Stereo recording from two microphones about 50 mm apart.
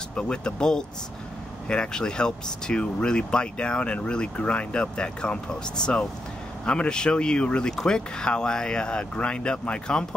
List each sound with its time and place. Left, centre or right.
0.1 s speech: left